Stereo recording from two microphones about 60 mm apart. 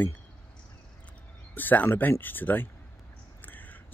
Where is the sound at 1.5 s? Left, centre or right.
Left.